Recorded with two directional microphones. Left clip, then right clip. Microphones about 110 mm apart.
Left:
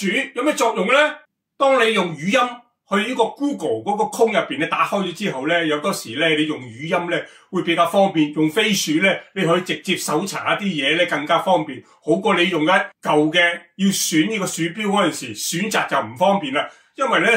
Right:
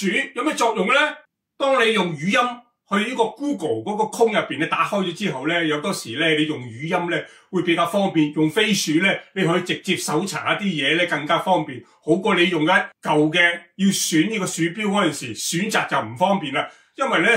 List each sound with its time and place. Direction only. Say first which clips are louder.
0.1 s a man's voice: left 3 dB; 40° left (ahead or behind)